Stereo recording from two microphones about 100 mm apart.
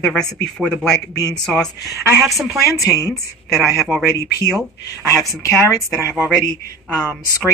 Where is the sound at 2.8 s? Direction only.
30° left (ahead or behind).